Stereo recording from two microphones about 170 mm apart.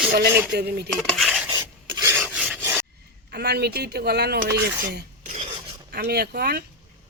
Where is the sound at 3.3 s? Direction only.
70° right (ahead or behind).